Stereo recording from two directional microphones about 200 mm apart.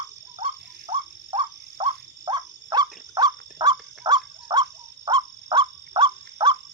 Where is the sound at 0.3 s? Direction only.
30° right (ahead or behind).